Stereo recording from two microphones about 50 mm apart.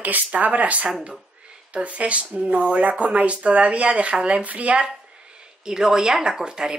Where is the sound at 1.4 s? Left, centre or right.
Right.